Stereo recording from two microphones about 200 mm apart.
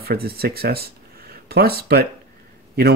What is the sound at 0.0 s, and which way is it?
Speech, 50° right (ahead or behind).